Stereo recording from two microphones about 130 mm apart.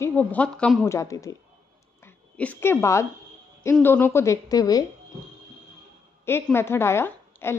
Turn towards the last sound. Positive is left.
turn(degrees=20)  # may be behind; listen again after turning